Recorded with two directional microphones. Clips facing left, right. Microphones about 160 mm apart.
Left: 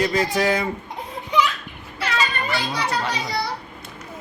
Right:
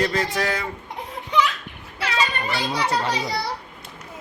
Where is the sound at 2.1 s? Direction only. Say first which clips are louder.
Even; 30° right (ahead or behind).